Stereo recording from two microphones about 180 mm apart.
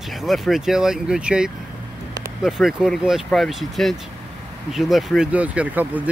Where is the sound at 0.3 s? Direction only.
Centre (ahead or behind).